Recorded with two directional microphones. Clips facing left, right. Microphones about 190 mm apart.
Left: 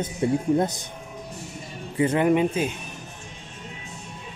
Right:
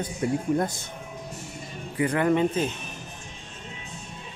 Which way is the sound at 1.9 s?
20° left (ahead or behind).